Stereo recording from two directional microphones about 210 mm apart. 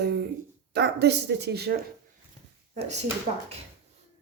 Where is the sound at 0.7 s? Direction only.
55° right (ahead or behind).